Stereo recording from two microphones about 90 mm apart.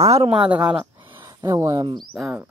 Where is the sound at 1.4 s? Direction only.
35° right (ahead or behind).